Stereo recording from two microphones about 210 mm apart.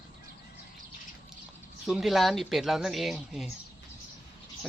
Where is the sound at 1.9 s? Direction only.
Centre (ahead or behind).